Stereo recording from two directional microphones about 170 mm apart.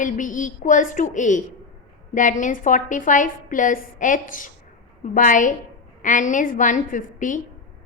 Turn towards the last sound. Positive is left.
turn(degrees=50)  # may be behind; listen again after turning